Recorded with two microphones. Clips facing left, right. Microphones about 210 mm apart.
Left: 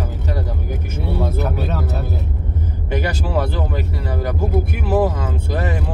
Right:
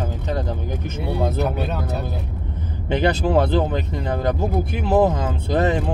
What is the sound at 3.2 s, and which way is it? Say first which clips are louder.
Speech: right 4 dB; 25° right (ahead or behind).